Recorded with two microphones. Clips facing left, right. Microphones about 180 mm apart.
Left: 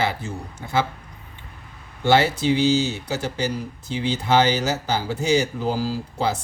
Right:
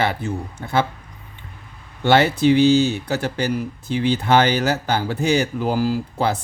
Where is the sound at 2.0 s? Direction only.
60° right (ahead or behind).